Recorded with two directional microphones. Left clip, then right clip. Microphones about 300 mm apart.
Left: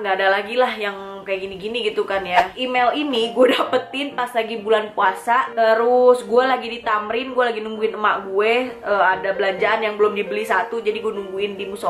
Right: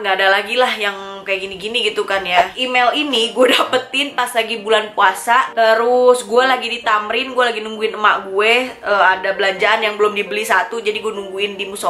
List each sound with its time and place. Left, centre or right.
0.0 s a woman's voice: centre
5.9 s speech: centre
6.3 s a woman's voice: centre